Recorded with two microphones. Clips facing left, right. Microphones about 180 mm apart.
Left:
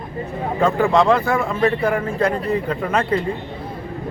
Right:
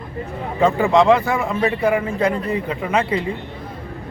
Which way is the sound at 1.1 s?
5° right (ahead or behind).